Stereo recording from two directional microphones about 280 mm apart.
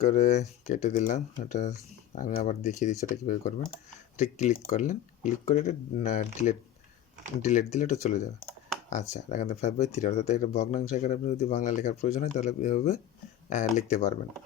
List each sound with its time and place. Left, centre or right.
0.0 s speech: left